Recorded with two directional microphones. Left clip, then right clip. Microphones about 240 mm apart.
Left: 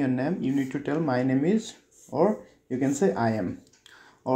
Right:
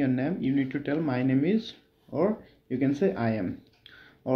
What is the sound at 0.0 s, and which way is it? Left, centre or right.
Speech, centre.